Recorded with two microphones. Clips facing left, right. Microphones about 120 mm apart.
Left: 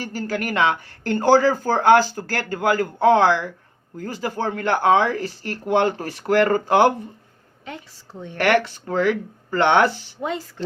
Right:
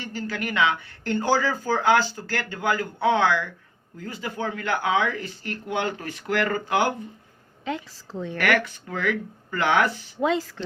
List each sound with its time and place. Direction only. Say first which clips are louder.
0.0 s speech: left 4 dB; 40° left (ahead or behind)
8.4 s speech: left 5 dB; 30° left (ahead or behind)